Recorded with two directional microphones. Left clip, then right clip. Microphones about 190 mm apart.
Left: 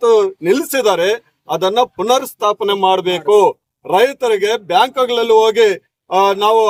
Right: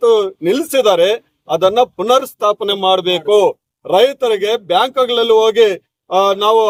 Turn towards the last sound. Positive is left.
turn(degrees=5)  # may be behind; listen again after turning